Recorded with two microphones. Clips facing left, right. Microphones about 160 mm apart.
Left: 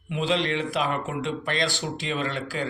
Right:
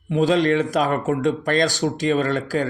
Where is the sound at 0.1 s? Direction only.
45° right (ahead or behind).